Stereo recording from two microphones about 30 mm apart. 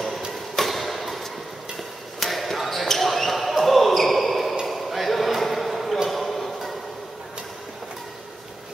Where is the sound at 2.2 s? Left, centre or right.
Centre.